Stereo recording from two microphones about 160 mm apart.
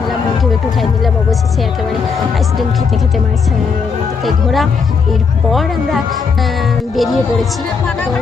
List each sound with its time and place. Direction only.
4.3 s speech: centre (ahead or behind)